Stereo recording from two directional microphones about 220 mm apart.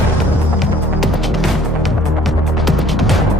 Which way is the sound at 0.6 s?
Centre (ahead or behind).